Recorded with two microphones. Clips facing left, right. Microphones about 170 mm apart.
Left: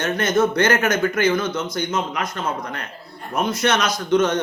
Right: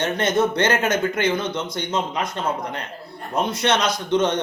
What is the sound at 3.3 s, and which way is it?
Speech, 30° right (ahead or behind).